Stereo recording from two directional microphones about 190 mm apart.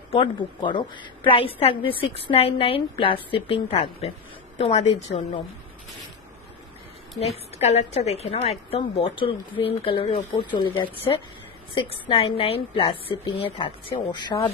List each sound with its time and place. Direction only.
0.1 s a woman's voice: 25° left (ahead or behind)
7.2 s a woman's voice: 35° left (ahead or behind)